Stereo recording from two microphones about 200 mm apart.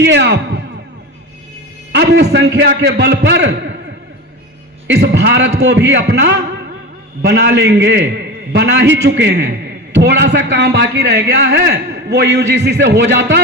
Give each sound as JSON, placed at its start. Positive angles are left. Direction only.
{"t": 0.0, "sound": "music", "side_deg": -60}
{"t": 1.9, "sound": "a man's voice", "side_deg": -60}
{"t": 4.9, "sound": "a man's voice", "side_deg": -60}